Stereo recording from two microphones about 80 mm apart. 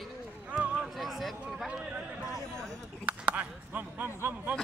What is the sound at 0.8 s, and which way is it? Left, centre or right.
Speech, centre.